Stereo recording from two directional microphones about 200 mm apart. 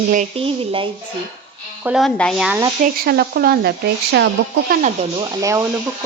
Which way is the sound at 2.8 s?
50° right (ahead or behind).